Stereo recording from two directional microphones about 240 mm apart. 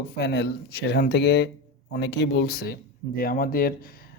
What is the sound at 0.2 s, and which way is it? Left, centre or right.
Speech, left.